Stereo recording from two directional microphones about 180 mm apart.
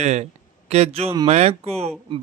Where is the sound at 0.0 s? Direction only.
40° right (ahead or behind).